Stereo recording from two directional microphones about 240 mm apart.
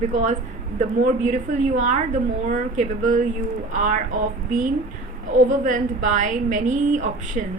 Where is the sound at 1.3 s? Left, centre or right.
Right.